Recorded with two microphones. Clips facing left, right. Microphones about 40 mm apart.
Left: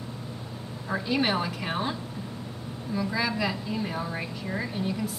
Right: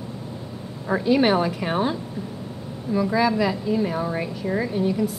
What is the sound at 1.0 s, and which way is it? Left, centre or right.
A woman's voice, centre.